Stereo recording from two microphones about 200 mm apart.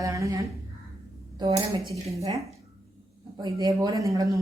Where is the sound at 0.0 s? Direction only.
15° right (ahead or behind).